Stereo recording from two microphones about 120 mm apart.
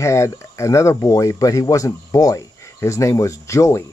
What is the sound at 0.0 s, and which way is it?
Speech, 25° left (ahead or behind).